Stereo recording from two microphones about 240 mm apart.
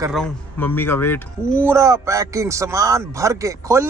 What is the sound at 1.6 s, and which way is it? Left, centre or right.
Speech, centre.